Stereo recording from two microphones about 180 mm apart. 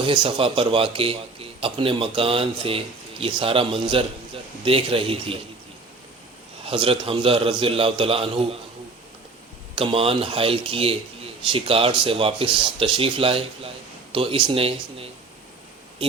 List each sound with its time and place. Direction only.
0.0 s a man's voice: 25° right (ahead or behind)
6.7 s a man's voice: 30° right (ahead or behind)
9.7 s a man's voice: 30° right (ahead or behind)